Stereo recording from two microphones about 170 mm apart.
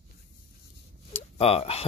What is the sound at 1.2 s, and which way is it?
Speech, 35° left (ahead or behind).